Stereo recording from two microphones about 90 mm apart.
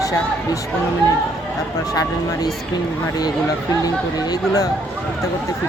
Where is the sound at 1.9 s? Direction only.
45° left (ahead or behind).